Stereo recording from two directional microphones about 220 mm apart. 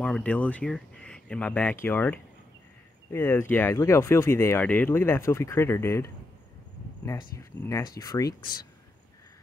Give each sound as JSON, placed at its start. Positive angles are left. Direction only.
{"t": 0.0, "sound": "speech", "side_deg": 5}